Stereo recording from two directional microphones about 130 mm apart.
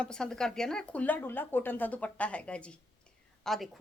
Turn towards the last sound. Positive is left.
turn(degrees=0)  # may be behind; listen again after turning